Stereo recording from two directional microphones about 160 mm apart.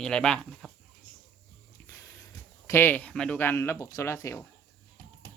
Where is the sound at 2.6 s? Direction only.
15° left (ahead or behind).